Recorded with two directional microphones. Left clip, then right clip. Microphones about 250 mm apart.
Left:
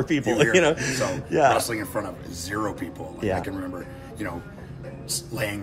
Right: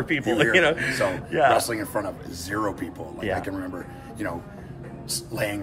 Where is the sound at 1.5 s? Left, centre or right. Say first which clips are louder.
Right 1 dB; centre.